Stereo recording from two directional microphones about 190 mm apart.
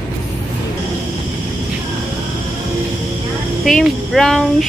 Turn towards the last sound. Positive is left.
turn(degrees=0)  # may be behind; listen again after turning